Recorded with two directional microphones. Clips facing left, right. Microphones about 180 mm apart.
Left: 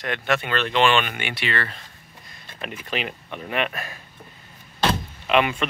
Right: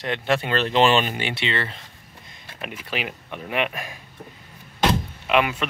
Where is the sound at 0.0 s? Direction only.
25° right (ahead or behind).